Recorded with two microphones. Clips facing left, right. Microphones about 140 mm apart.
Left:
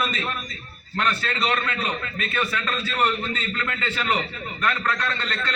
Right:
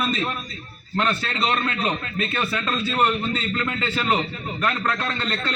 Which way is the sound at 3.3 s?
30° right (ahead or behind).